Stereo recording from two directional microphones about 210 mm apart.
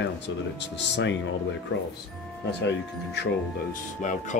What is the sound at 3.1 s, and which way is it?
Speech, 50° left (ahead or behind).